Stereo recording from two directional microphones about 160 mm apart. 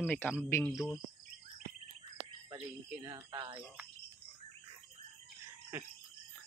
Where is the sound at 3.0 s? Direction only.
25° right (ahead or behind).